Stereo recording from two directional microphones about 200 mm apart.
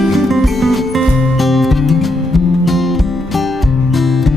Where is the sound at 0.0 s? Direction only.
Centre (ahead or behind).